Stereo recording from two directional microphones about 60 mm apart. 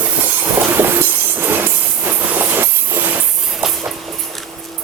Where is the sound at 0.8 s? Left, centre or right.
Right.